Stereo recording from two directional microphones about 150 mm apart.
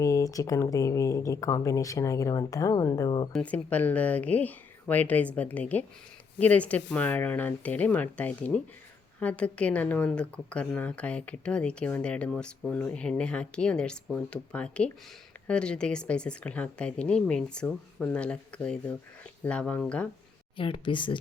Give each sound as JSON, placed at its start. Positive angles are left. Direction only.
{"t": 0.0, "sound": "speech", "side_deg": 20}
{"t": 3.3, "sound": "a woman's voice", "side_deg": 10}
{"t": 20.6, "sound": "speech", "side_deg": 35}